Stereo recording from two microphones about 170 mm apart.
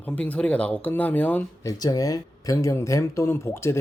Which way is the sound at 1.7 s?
20° left (ahead or behind).